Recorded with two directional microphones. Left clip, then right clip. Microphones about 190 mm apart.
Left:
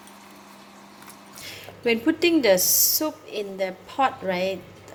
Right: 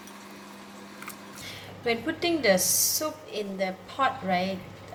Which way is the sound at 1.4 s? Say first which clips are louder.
Left 5 dB; 45° left (ahead or behind).